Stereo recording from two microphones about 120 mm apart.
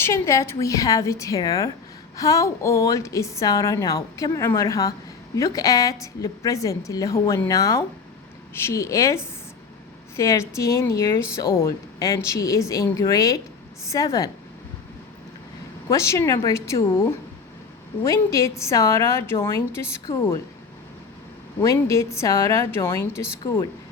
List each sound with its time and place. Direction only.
0.0 s a woman's voice: 25° left (ahead or behind)
15.9 s a woman's voice: 25° left (ahead or behind)
21.6 s a woman's voice: 25° left (ahead or behind)